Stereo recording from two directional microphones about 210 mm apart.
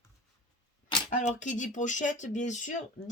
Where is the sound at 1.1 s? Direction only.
35° left (ahead or behind).